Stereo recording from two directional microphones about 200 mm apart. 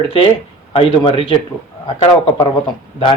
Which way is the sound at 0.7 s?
25° left (ahead or behind).